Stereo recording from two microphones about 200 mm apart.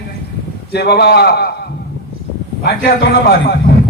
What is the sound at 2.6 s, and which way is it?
A man's voice, 50° left (ahead or behind).